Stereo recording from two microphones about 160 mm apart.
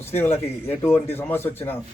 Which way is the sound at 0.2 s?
15° left (ahead or behind).